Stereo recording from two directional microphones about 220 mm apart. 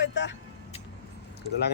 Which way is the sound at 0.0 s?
55° left (ahead or behind).